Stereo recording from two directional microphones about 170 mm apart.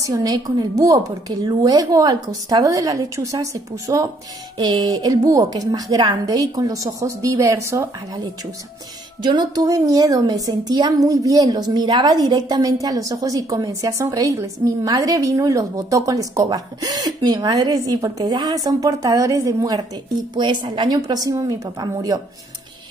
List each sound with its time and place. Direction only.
0.1 s a woman's voice: 20° right (ahead or behind)
9.2 s a woman's voice: 25° right (ahead or behind)